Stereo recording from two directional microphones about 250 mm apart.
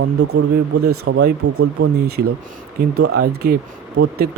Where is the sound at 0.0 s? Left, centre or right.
Right.